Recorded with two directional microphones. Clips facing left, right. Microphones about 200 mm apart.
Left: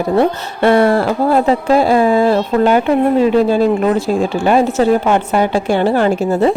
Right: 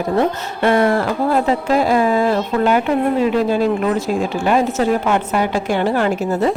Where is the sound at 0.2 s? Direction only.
30° left (ahead or behind).